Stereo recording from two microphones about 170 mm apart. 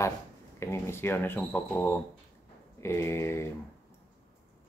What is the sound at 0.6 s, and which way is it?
Speech, 15° left (ahead or behind).